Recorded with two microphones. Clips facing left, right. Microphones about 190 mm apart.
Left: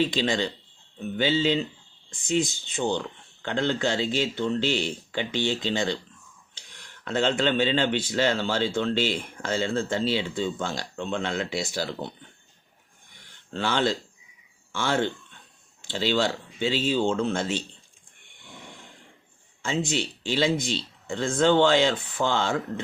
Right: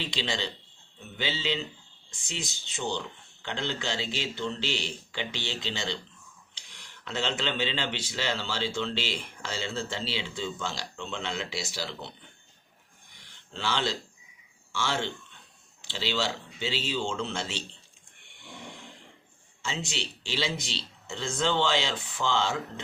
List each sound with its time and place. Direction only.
0.0 s speech: 50° left (ahead or behind)
13.1 s a sound: 50° left (ahead or behind)
14.7 s speech: 55° left (ahead or behind)
19.6 s speech: 50° left (ahead or behind)